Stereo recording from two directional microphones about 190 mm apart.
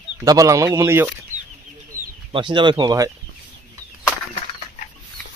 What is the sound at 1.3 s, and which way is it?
Chicken, 40° right (ahead or behind).